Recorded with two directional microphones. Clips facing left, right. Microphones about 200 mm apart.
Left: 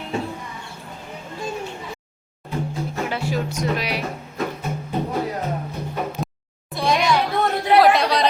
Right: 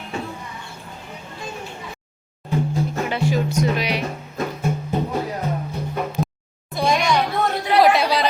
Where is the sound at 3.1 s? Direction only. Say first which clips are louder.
Right 3 dB; centre (ahead or behind).